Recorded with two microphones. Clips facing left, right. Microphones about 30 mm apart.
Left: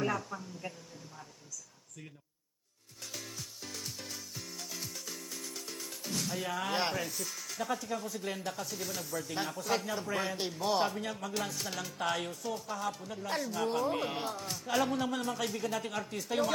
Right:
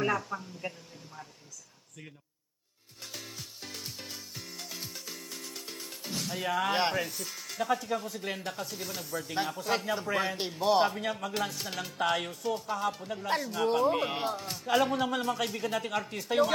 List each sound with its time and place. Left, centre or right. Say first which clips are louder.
0.1 s speech: right 4 dB; centre
3.1 s music: right 1 dB; centre
6.2 s speech: right 7 dB; centre